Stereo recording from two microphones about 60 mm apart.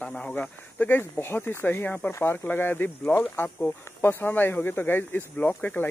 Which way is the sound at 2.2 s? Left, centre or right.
Left.